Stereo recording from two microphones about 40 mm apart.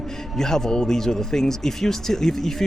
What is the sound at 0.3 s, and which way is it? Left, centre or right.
Speech, centre.